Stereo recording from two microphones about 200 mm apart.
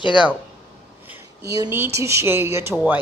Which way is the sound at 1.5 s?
15° right (ahead or behind).